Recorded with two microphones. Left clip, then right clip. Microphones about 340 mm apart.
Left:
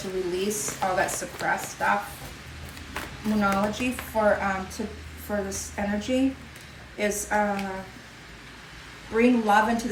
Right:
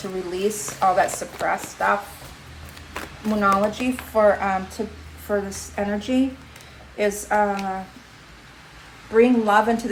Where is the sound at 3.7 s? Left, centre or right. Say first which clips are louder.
Right 6 dB; right.